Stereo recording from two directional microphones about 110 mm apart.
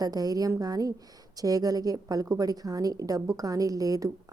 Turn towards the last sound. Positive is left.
turn(degrees=-35)  # may be behind; listen again after turning